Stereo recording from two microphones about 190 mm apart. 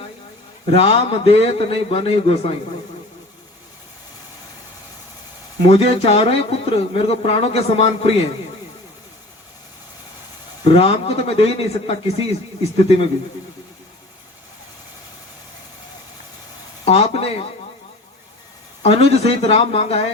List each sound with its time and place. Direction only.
0.7 s speech: 30° left (ahead or behind)
5.6 s speech: 35° left (ahead or behind)
10.6 s speech: 35° left (ahead or behind)
16.8 s speech: 35° left (ahead or behind)
18.8 s speech: 35° left (ahead or behind)